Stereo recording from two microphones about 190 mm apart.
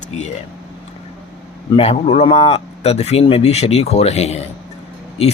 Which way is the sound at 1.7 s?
30° left (ahead or behind).